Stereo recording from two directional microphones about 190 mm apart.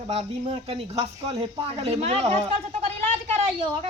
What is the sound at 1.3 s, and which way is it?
Speech, 30° right (ahead or behind).